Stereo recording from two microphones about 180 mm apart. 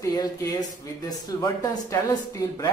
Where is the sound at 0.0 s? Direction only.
20° left (ahead or behind).